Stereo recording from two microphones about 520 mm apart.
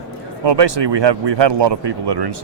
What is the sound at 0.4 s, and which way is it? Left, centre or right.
Speech, right.